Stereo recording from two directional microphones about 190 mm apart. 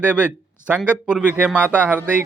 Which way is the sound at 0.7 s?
5° right (ahead or behind).